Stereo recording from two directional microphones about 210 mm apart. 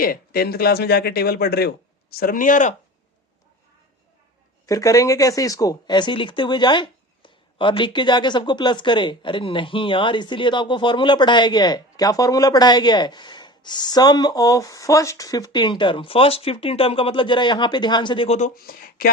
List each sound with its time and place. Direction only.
0.0 s speech: 45° left (ahead or behind)
4.6 s speech: 15° left (ahead or behind); by 19.1 s 45° left (ahead or behind)